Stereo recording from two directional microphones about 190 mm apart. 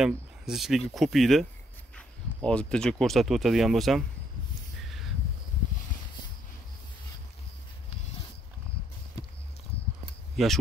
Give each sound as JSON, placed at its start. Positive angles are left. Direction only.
{"t": 0.0, "sound": "speech", "side_deg": 0}
{"t": 4.8, "sound": "a sound", "side_deg": 0}
{"t": 10.3, "sound": "speech", "side_deg": 0}